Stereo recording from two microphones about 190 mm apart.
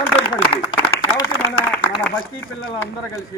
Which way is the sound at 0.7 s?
20° left (ahead or behind).